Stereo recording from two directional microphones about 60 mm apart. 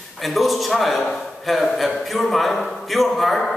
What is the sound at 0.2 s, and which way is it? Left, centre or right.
A man's voice, centre.